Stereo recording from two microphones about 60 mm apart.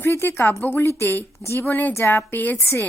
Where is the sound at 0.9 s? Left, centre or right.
Left.